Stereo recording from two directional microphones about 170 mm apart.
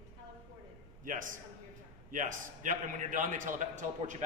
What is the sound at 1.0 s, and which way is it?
A man's voice, 50° right (ahead or behind).